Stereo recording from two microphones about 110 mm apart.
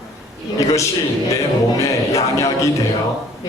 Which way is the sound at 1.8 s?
30° left (ahead or behind).